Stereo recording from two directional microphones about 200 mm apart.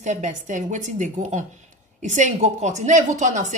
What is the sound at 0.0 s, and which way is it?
A woman's voice, 35° right (ahead or behind).